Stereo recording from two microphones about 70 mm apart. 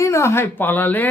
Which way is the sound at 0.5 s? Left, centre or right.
Left.